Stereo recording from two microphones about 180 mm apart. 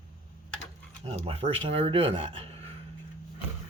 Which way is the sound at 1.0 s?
35° right (ahead or behind).